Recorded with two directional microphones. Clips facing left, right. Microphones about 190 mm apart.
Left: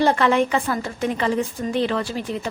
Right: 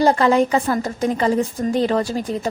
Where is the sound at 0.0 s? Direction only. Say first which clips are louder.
Right 3 dB; 35° right (ahead or behind).